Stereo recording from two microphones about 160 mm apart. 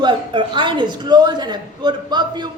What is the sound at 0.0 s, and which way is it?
A woman's voice, 30° right (ahead or behind).